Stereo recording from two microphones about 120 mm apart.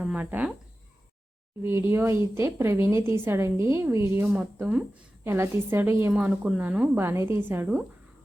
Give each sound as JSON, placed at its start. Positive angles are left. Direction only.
{"t": 0.0, "sound": "speech", "side_deg": -10}
{"t": 1.6, "sound": "speech", "side_deg": -20}
{"t": 4.6, "sound": "a woman's voice", "side_deg": -10}
{"t": 5.2, "sound": "speech", "side_deg": -20}